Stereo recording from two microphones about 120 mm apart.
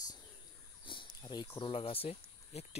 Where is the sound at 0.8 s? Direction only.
45° left (ahead or behind).